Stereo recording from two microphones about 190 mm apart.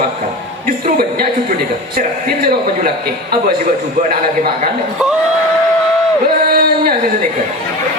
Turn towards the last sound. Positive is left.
turn(degrees=-50)  # may be behind; listen again after turning